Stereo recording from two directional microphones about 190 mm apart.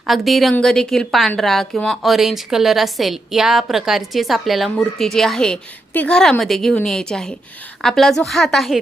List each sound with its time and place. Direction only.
0.1 s a woman's voice: centre (ahead or behind)